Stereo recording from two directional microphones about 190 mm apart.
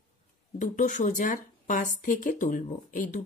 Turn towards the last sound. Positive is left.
turn(degrees=40)  # may be behind; listen again after turning